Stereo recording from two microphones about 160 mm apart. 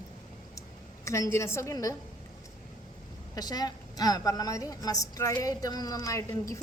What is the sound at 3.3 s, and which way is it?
A woman's voice, 25° left (ahead or behind).